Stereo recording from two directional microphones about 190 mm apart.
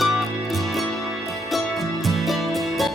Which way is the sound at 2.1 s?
Centre (ahead or behind).